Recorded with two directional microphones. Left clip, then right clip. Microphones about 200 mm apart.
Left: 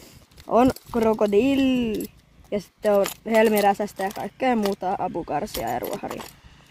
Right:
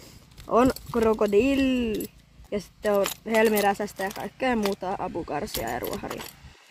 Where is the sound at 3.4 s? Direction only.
45° left (ahead or behind).